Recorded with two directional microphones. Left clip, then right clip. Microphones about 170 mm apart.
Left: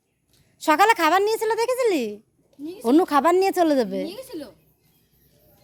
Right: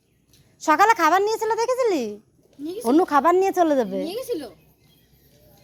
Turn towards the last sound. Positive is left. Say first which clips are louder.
# right 4 dB
turn(degrees=20)  # may be behind; listen again after turning